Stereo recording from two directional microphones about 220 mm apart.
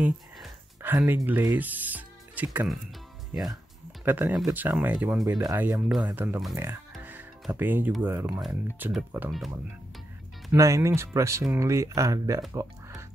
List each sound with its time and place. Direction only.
0.0 s a sound: 10° right (ahead or behind)
2.5 s speech: 5° right (ahead or behind)
4.0 s speech: 10° right (ahead or behind)
5.2 s speech: 15° right (ahead or behind)
6.9 s music: 5° right (ahead or behind)
8.5 s speech: 10° right (ahead or behind)
10.5 s speech: 15° right (ahead or behind)